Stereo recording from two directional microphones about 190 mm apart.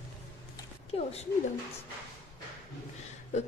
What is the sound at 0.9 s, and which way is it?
Speech, 30° left (ahead or behind).